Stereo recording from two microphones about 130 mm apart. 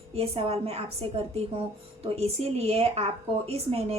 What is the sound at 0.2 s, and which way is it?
A woman's voice, 50° right (ahead or behind).